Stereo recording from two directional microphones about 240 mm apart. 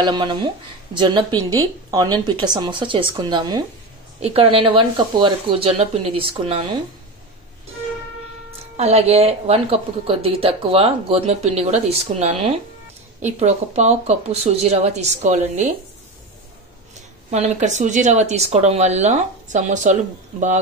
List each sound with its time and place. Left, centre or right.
0.0 s a woman's voice: centre
8.5 s a woman's voice: right
17.3 s a woman's voice: right